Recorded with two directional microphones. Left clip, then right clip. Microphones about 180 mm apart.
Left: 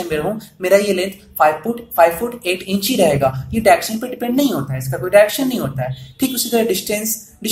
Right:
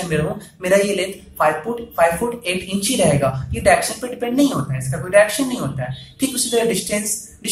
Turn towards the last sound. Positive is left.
turn(degrees=40)  # may be behind; listen again after turning